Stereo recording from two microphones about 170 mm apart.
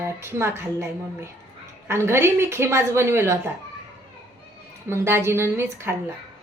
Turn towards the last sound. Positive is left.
turn(degrees=-15)  # may be behind; listen again after turning